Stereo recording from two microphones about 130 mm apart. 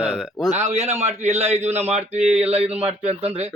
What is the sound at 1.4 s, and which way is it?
Speech, 15° right (ahead or behind).